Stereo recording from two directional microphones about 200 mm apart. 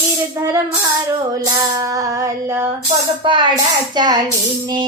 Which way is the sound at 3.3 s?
20° right (ahead or behind).